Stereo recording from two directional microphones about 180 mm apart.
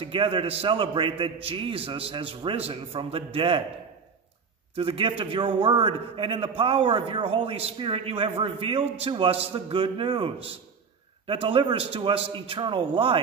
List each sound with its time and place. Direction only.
0.0 s a man's voice: 30° right (ahead or behind)
4.7 s a man's voice: 30° right (ahead or behind)